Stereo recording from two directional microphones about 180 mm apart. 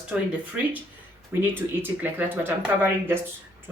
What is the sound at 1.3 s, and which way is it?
A woman's voice, 15° right (ahead or behind).